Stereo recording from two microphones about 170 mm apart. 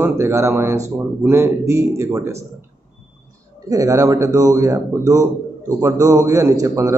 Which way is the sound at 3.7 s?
20° right (ahead or behind).